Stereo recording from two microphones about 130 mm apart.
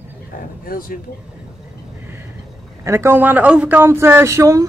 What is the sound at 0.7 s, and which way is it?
Speech, 90° left.